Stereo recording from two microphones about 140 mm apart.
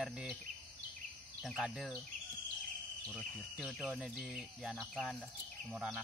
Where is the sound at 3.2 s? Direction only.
5° right (ahead or behind).